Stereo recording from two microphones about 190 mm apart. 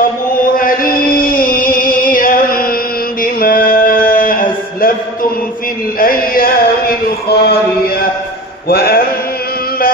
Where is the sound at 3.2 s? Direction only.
50° left (ahead or behind).